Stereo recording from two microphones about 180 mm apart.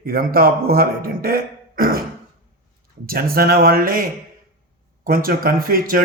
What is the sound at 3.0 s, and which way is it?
A man's voice, 55° right (ahead or behind).